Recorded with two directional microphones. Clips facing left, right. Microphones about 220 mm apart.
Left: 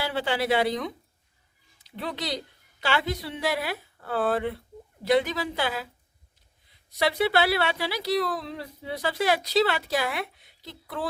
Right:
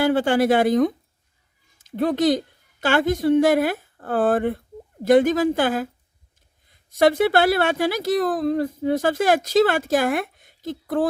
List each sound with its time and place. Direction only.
0.0 s a woman's voice: 50° right (ahead or behind)